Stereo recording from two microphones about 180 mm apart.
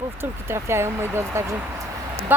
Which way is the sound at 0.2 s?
15° right (ahead or behind).